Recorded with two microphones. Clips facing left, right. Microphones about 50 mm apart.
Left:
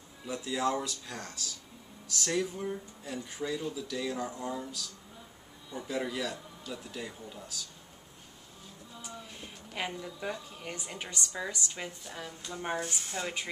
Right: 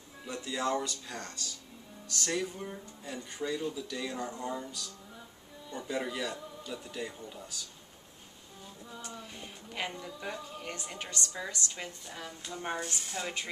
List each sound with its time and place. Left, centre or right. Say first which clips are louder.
0.3 s speech: left 1 dB; centre
9.7 s a woman's voice: left 1 dB; centre